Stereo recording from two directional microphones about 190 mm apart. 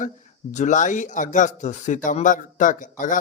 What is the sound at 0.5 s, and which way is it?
Speech, 40° left (ahead or behind).